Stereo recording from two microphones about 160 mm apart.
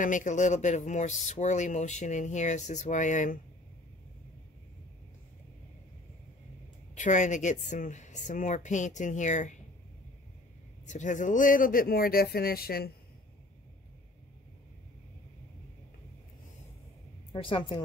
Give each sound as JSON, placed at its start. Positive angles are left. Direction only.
{"t": 0.0, "sound": "speech", "side_deg": 55}
{"t": 7.0, "sound": "speech", "side_deg": 50}
{"t": 10.9, "sound": "speech", "side_deg": 50}
{"t": 17.3, "sound": "a woman's voice", "side_deg": 35}